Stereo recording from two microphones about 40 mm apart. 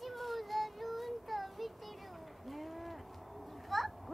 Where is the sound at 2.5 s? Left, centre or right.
Centre.